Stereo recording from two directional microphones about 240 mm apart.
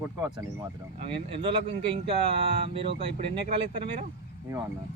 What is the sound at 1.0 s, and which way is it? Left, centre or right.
Speech, right.